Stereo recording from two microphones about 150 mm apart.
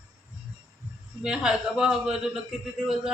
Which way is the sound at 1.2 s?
5° right (ahead or behind).